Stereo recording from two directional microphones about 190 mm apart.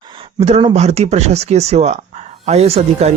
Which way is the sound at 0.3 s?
35° right (ahead or behind).